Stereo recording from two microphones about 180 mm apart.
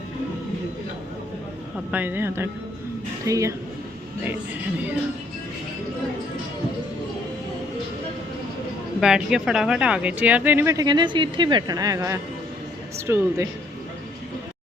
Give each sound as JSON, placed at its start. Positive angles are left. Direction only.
{"t": 1.9, "sound": "speech", "side_deg": -10}
{"t": 9.0, "sound": "speech", "side_deg": -5}